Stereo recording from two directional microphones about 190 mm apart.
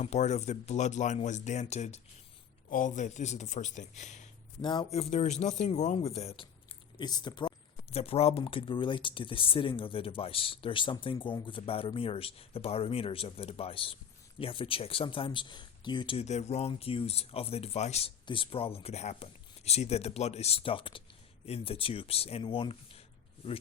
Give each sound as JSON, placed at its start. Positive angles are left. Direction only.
{"t": 0.0, "sound": "speech", "side_deg": 35}
{"t": 4.6, "sound": "speech", "side_deg": 25}